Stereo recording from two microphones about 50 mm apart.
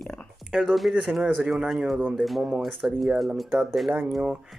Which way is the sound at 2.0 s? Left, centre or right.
Right.